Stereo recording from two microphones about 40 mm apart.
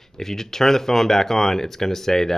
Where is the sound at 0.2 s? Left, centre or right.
Centre.